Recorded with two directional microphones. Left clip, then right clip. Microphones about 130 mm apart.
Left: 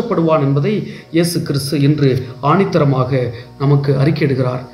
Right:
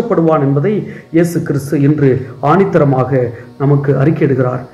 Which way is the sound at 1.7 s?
15° left (ahead or behind).